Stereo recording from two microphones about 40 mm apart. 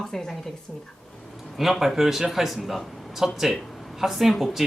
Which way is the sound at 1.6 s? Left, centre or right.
Centre.